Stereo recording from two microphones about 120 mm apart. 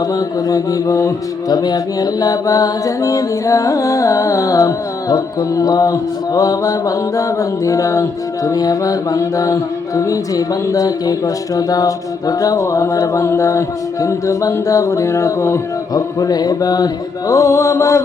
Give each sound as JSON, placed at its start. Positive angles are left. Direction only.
{"t": 0.0, "sound": "mantra", "side_deg": 30}